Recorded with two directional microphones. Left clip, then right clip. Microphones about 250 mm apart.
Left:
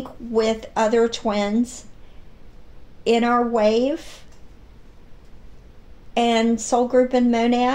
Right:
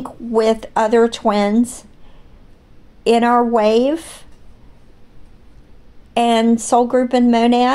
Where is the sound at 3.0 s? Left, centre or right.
Right.